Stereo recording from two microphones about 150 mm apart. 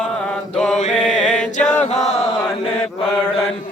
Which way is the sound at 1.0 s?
5° left (ahead or behind).